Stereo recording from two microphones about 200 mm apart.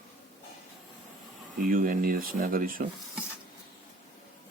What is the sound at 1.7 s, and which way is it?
Speech, 45° right (ahead or behind).